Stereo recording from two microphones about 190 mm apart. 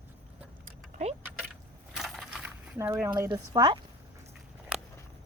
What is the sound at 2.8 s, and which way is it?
Speech, 15° right (ahead or behind).